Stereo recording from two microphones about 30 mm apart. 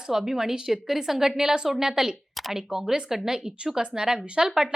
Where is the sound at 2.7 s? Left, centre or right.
Centre.